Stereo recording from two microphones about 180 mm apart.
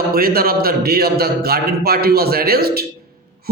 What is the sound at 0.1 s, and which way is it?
A man's voice, 55° right (ahead or behind).